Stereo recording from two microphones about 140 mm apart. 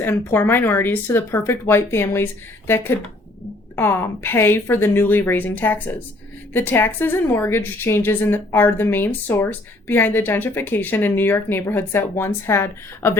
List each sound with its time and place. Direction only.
0.0 s a woman's voice: 15° left (ahead or behind)